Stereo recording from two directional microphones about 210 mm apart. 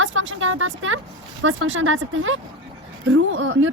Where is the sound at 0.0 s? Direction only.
65° right (ahead or behind).